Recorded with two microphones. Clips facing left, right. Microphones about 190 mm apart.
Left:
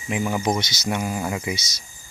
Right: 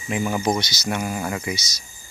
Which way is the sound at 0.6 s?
20° left (ahead or behind).